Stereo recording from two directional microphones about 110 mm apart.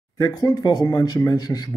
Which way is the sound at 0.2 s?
35° left (ahead or behind).